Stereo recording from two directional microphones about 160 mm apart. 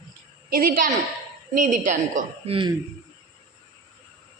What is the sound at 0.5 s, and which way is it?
A woman's voice, 60° right (ahead or behind).